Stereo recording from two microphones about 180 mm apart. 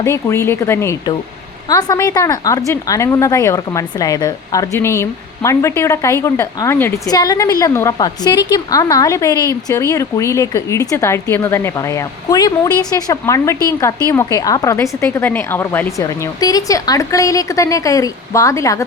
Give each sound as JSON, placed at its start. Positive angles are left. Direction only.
{"t": 0.0, "sound": "a woman's voice", "side_deg": 15}